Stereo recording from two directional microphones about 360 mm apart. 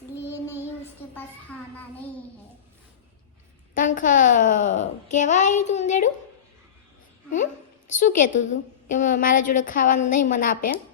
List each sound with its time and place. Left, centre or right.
0.3 s child singing: centre
1.1 s a sound: centre
3.8 s a child's voice: left
7.9 s a child's voice: left